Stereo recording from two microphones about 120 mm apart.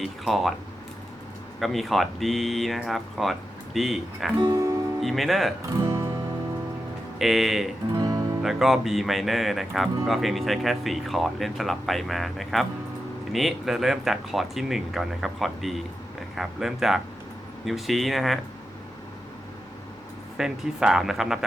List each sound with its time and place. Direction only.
0.0 s speech: centre (ahead or behind)
1.6 s speech: centre (ahead or behind)
4.5 s music: 25° right (ahead or behind)
4.9 s speech: centre (ahead or behind)
5.6 s speech: 25° right (ahead or behind)
7.2 s speech: centre (ahead or behind)
7.9 s music: 35° right (ahead or behind)
8.4 s speech: 5° right (ahead or behind)
20.3 s speech: 5° right (ahead or behind)